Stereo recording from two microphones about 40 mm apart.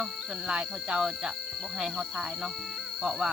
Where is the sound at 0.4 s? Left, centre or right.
Right.